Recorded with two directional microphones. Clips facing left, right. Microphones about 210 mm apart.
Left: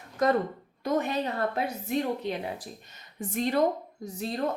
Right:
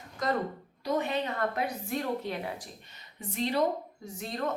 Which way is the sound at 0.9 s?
45° left (ahead or behind).